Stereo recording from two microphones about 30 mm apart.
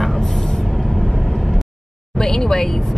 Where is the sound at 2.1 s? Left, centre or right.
Centre.